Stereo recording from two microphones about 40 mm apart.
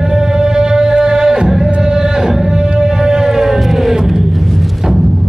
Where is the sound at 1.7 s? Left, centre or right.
Centre.